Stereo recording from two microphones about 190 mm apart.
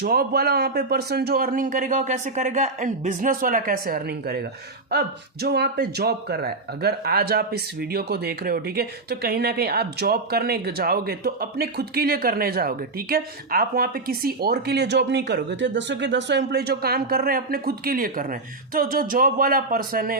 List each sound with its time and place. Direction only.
0.0 s a man's voice: 55° right (ahead or behind)